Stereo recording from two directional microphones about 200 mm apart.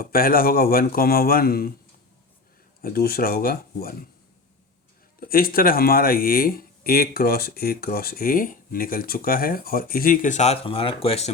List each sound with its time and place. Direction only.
0.0 s speech: 45° left (ahead or behind)
2.8 s speech: 50° left (ahead or behind)
5.2 s speech: 45° left (ahead or behind); by 11.3 s 30° left (ahead or behind)